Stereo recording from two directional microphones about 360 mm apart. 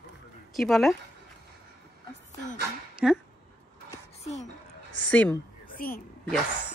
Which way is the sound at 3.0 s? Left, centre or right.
Centre.